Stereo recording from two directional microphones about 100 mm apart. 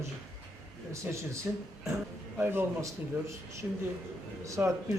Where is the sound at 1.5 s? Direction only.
15° right (ahead or behind).